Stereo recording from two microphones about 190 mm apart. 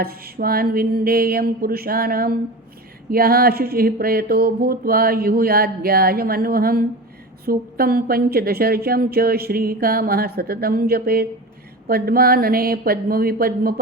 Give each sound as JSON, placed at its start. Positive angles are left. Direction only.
{"t": 0.0, "sound": "a woman's voice", "side_deg": -55}